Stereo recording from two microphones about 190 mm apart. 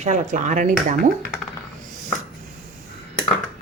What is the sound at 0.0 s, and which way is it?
Speech, 40° right (ahead or behind).